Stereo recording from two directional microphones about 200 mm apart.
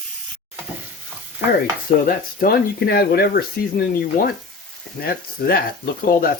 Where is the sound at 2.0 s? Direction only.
45° left (ahead or behind).